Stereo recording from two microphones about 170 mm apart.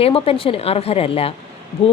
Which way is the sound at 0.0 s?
35° left (ahead or behind).